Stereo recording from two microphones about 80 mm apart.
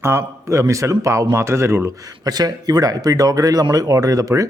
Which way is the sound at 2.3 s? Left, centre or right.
Right.